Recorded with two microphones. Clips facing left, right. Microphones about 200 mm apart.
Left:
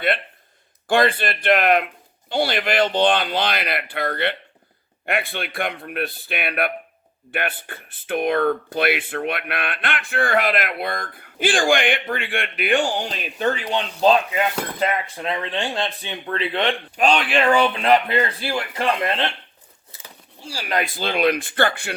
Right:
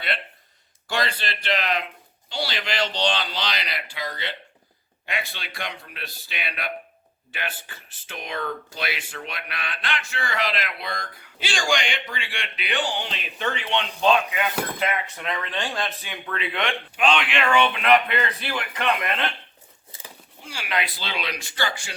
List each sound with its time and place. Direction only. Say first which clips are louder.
0.9 s speech: left 9 dB; 55° left (ahead or behind); by 19.3 s 30° left (ahead or behind)
20.4 s speech: left 4 dB; 35° left (ahead or behind); by 21.9 s 60° left (ahead or behind)